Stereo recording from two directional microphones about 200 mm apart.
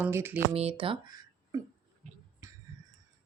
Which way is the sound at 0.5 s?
30° right (ahead or behind).